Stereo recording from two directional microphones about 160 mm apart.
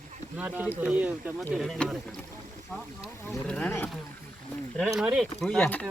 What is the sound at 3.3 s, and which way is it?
Speech, 5° left (ahead or behind).